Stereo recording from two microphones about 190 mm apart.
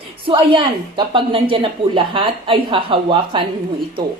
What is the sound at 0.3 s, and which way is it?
A woman's voice, 25° right (ahead or behind).